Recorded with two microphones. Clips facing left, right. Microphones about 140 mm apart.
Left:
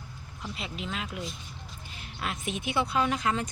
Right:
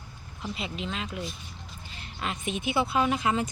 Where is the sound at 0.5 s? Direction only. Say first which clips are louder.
Right 2 dB; centre (ahead or behind).